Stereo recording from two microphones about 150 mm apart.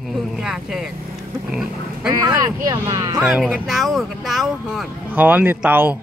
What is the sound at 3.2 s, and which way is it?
Speech, 10° right (ahead or behind).